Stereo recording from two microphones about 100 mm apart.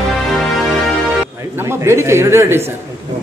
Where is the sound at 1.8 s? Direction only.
25° right (ahead or behind).